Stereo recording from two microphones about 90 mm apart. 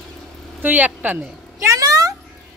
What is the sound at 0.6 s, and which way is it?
Speech, 20° right (ahead or behind).